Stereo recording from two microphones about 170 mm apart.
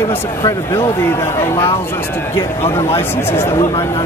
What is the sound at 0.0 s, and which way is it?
Speech, 15° left (ahead or behind).